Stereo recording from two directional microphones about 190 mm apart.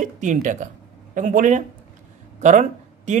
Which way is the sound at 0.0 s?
40° right (ahead or behind).